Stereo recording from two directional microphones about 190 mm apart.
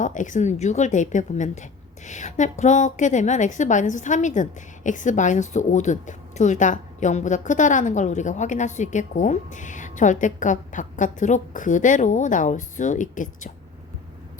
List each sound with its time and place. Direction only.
0.0 s a woman's voice: 40° left (ahead or behind)